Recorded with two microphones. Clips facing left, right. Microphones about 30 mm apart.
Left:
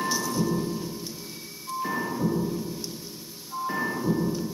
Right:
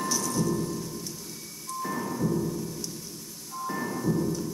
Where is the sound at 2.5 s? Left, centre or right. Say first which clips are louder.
Left 2 dB; left.